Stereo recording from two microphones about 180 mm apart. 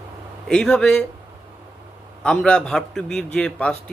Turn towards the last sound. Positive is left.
turn(degrees=5)  # may be behind; listen again after turning